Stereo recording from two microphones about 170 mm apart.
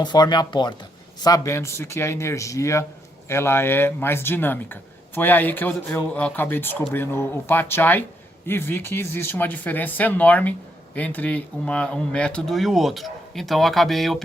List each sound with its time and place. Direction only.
0.0 s a man's voice: 25° left (ahead or behind); by 14.3 s centre (ahead or behind)